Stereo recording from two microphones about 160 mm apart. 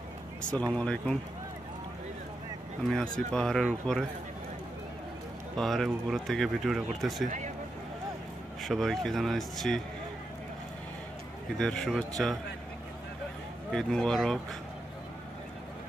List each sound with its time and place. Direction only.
0.4 s speech: 5° left (ahead or behind)
2.9 s speech: 5° left (ahead or behind)
5.6 s speech: centre (ahead or behind)
7.2 s a sound: 50° right (ahead or behind)
8.6 s speech: centre (ahead or behind)
11.5 s speech: 5° left (ahead or behind)
13.7 s speech: 5° left (ahead or behind)